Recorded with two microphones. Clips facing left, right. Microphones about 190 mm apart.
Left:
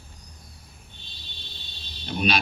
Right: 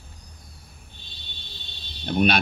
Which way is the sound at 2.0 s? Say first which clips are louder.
Right 4 dB; 60° right (ahead or behind).